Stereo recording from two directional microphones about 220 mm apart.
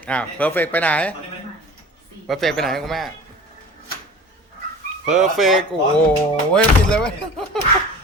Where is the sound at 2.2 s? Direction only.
Centre (ahead or behind).